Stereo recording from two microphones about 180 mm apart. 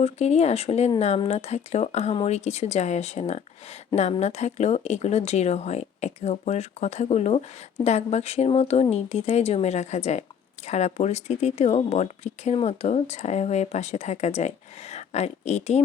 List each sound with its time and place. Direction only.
0.0 s speech: 35° left (ahead or behind)